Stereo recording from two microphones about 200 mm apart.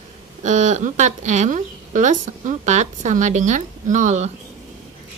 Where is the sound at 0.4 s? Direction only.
35° right (ahead or behind).